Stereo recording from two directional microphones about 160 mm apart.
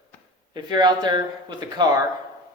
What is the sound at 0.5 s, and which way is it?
Speech, 25° right (ahead or behind).